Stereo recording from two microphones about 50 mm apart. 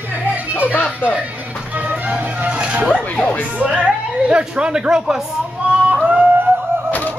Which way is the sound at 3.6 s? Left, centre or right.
Right.